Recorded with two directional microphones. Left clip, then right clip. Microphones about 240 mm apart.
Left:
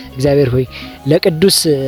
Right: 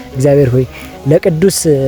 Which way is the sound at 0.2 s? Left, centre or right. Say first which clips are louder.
Right 3 dB; left.